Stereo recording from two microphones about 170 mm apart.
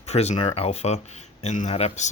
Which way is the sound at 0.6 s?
40° left (ahead or behind).